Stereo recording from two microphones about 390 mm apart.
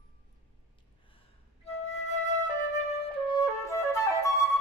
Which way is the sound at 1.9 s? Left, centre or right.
Centre.